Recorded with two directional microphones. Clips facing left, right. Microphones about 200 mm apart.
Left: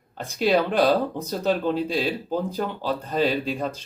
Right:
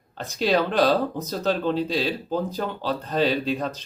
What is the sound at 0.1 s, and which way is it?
Speech, 10° left (ahead or behind).